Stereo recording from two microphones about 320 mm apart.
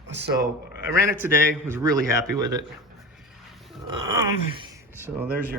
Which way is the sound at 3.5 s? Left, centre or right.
Centre.